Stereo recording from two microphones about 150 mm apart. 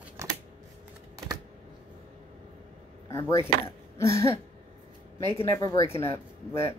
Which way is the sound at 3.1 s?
20° left (ahead or behind).